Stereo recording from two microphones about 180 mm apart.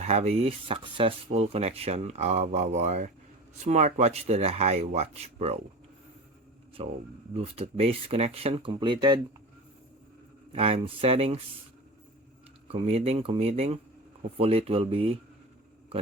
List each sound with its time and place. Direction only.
0.0 s speech: 35° right (ahead or behind)
6.8 s speech: 35° right (ahead or behind)
10.5 s speech: 30° right (ahead or behind)
12.6 s speech: 35° right (ahead or behind)